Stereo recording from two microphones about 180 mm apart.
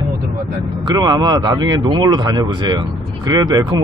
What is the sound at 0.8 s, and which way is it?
Speech, 25° right (ahead or behind).